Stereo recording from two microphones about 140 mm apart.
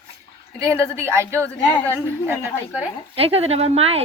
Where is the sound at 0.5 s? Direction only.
20° right (ahead or behind).